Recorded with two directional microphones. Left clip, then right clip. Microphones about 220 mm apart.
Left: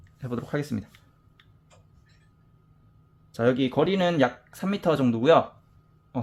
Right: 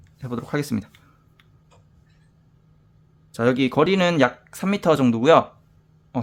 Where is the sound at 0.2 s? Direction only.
5° right (ahead or behind).